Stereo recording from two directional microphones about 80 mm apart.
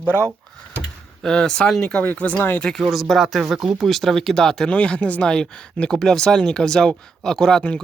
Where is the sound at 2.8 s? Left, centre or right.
Centre.